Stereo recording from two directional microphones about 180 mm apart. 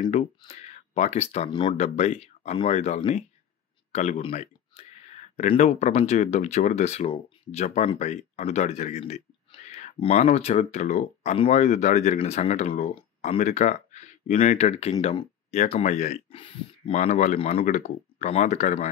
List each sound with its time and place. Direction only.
0.1 s speech: 35° left (ahead or behind)
16.9 s speech: 40° left (ahead or behind)